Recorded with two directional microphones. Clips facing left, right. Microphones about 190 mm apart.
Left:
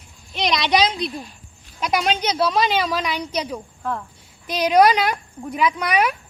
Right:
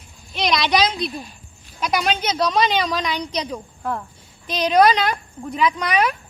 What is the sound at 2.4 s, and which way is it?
Speech, centre (ahead or behind).